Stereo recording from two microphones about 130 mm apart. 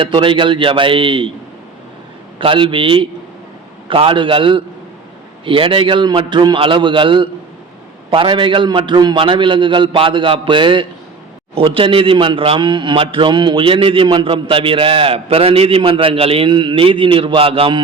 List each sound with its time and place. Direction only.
0.0 s a man's voice: 40° right (ahead or behind)
2.4 s a man's voice: 40° right (ahead or behind)